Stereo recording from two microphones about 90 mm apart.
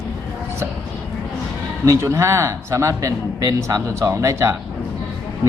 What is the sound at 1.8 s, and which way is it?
A man's voice, 35° right (ahead or behind).